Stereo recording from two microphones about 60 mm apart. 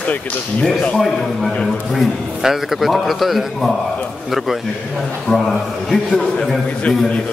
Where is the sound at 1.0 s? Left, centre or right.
Centre.